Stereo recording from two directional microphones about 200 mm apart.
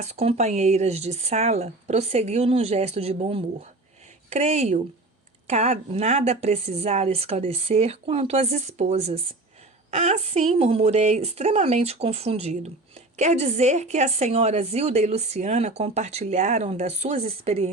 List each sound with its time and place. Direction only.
0.0 s a woman's voice: 35° right (ahead or behind)